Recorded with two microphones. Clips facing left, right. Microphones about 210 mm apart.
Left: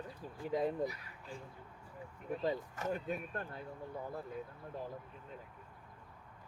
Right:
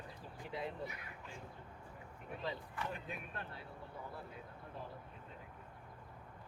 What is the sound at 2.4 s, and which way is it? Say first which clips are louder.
Speech: left 5 dB; 45° left (ahead or behind).